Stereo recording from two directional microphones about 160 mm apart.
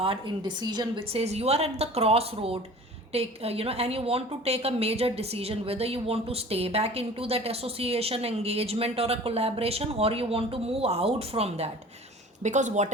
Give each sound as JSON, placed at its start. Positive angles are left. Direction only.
{"t": 0.0, "sound": "a woman's voice", "side_deg": -35}